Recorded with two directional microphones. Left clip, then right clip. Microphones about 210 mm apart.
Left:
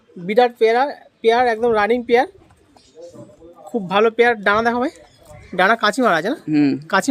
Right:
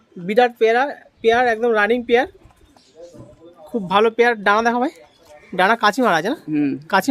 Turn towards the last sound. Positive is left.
turn(degrees=0)  # may be behind; listen again after turning